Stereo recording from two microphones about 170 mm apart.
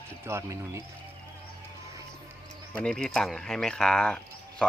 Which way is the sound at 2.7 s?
5° left (ahead or behind).